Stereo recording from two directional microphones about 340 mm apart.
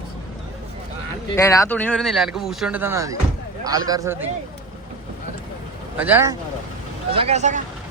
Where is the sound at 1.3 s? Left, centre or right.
Centre.